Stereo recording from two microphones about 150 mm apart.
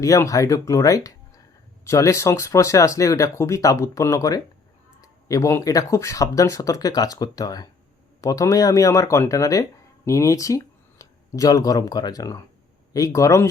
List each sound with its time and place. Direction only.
0.0 s speech: 20° left (ahead or behind)